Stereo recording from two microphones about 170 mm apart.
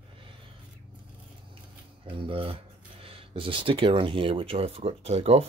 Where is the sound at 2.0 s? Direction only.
30° right (ahead or behind).